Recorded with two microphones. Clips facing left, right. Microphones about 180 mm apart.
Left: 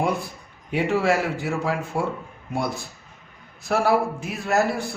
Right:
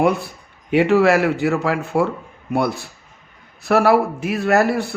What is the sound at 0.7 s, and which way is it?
A man's voice, 75° right (ahead or behind).